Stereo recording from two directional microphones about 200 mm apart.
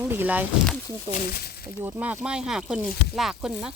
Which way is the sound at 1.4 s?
50° left (ahead or behind).